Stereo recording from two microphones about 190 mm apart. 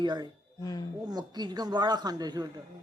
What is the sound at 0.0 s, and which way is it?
Speech, 20° right (ahead or behind).